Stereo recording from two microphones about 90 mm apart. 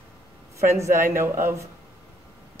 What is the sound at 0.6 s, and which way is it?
Speech, 30° right (ahead or behind).